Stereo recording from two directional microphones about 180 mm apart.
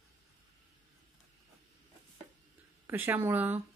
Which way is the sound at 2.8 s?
10° right (ahead or behind).